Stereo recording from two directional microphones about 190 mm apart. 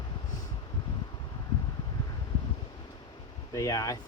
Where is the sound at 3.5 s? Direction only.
20° left (ahead or behind).